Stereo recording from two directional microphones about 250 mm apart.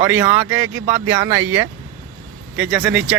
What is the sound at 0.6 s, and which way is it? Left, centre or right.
Speech, centre.